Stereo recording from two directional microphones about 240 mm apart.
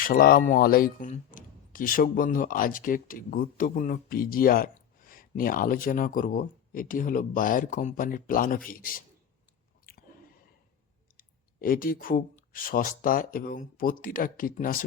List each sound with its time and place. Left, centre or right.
0.0 s speech: left
11.2 s speech: left